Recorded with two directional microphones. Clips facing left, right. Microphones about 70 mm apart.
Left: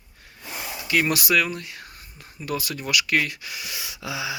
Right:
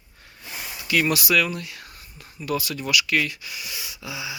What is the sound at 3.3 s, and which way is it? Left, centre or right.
Speech, left.